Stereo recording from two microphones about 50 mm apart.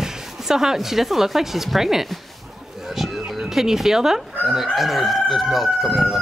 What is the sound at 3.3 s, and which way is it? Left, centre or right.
Speech, centre.